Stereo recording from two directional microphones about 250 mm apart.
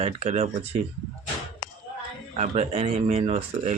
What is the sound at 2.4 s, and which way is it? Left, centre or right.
Speech, right.